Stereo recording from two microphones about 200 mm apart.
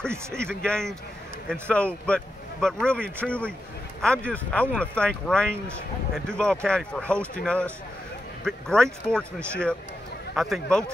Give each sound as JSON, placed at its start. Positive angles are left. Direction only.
{"t": 0.3, "sound": "speech", "side_deg": 5}